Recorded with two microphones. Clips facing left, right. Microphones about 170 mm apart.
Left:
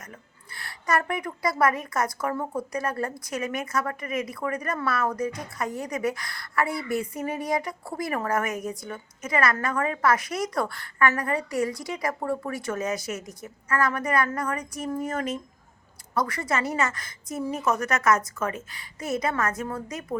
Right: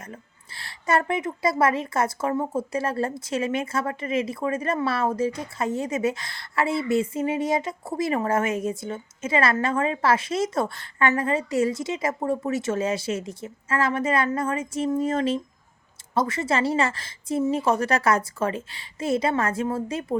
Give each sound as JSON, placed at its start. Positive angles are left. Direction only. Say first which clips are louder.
{"t": 0.0, "sound": "a woman's voice", "louder": "right 5 dB", "side_deg": -30}